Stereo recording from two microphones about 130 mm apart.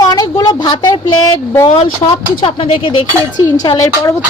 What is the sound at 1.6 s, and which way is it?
Speech, 50° left (ahead or behind).